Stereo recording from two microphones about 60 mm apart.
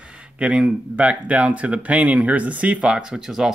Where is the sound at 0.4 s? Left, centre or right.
Centre.